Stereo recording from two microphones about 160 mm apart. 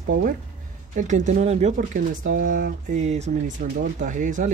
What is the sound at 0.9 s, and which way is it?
Speech, 50° right (ahead or behind).